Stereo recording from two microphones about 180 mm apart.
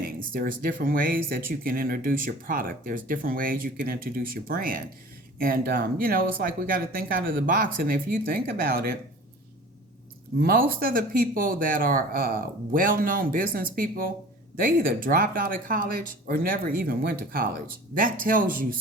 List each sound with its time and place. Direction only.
0.0 s speech: 55° right (ahead or behind)
10.4 s speech: 55° right (ahead or behind)